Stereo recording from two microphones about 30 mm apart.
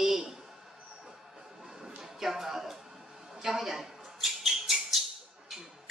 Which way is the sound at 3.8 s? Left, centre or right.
Centre.